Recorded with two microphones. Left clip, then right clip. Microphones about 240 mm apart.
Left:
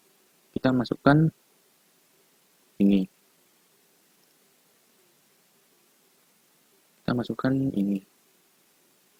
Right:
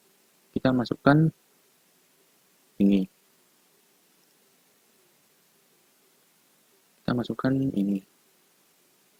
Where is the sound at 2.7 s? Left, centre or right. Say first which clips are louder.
Even; right.